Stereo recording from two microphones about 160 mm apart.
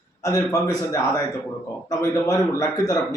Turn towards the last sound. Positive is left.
turn(degrees=25)  # may be behind; listen again after turning